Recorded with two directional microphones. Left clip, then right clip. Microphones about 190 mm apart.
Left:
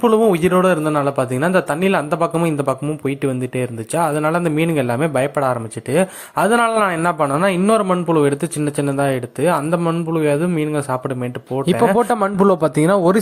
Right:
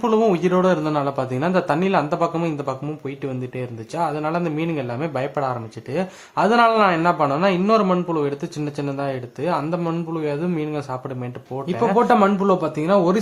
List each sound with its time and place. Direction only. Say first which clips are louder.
0.0 s speech: left 4 dB; 30° left (ahead or behind)
11.6 s a man's voice: left 3 dB; 45° left (ahead or behind)